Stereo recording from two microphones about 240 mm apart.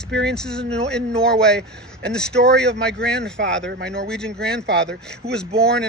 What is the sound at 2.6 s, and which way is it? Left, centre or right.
Speech, right.